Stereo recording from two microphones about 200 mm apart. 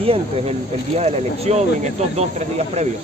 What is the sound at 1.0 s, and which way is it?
Speech, 35° right (ahead or behind).